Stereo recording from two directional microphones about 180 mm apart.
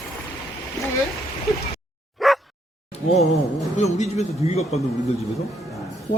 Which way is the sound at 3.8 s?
40° left (ahead or behind).